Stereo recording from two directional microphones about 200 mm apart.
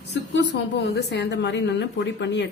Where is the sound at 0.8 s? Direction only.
55° left (ahead or behind).